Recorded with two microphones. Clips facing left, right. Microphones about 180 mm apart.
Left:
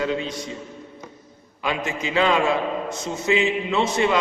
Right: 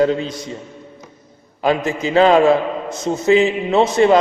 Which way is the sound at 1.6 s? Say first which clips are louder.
Right 8 dB; 40° right (ahead or behind).